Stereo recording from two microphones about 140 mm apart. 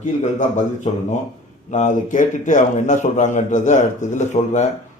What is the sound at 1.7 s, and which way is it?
A man's voice, 60° left (ahead or behind).